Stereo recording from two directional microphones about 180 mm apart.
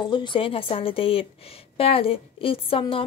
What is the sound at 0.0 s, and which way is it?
A woman's voice, 25° left (ahead or behind).